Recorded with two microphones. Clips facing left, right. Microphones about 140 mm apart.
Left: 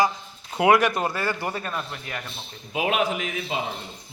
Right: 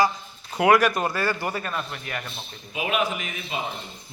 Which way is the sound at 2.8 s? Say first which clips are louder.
Left 2 dB; 90° left.